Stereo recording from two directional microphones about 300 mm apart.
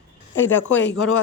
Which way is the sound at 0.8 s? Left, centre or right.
Left.